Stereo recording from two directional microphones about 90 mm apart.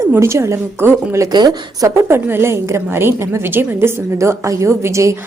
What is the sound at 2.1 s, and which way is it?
A woman's voice, 25° right (ahead or behind).